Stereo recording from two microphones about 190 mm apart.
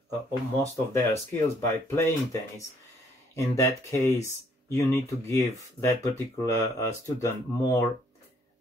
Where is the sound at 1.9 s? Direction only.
15° left (ahead or behind).